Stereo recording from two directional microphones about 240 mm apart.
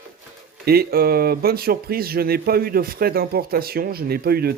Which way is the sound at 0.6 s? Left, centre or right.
Right.